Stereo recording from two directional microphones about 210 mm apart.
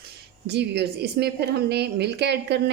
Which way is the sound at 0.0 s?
50° right (ahead or behind).